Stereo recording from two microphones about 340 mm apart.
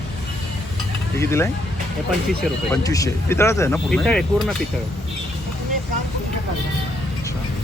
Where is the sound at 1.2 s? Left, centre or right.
Centre.